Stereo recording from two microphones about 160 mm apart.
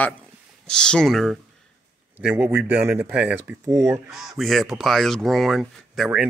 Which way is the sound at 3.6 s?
20° right (ahead or behind).